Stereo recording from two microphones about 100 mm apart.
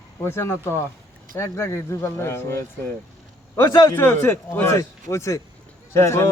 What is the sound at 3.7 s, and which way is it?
Speech, 45° left (ahead or behind).